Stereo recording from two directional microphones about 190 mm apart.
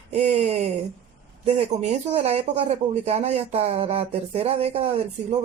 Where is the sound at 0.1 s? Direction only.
35° right (ahead or behind).